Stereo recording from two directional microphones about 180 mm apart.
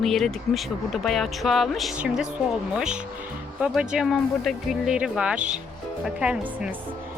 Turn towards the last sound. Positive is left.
turn(degrees=-5)  # may be behind; listen again after turning